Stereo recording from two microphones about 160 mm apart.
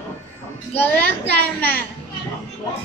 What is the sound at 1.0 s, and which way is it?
Speech, 75° right (ahead or behind).